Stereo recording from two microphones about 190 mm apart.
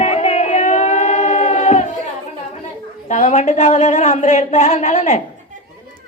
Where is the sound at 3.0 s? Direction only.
40° left (ahead or behind).